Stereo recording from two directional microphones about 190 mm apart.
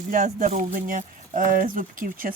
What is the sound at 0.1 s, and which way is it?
Speech, 45° right (ahead or behind).